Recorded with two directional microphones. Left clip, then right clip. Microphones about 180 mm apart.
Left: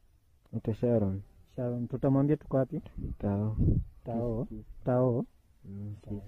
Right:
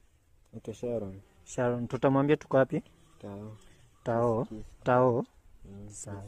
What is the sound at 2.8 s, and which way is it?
Speech, 40° left (ahead or behind).